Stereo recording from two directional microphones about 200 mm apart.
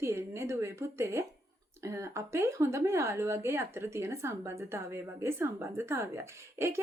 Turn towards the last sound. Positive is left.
turn(degrees=-10)  # may be behind; listen again after turning